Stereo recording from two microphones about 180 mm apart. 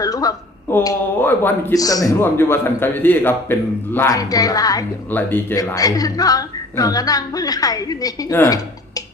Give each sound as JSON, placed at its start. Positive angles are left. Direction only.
{"t": 0.0, "sound": "speech", "side_deg": 20}